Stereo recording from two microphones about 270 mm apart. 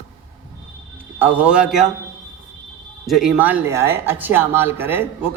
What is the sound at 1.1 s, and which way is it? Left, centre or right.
Speech, centre.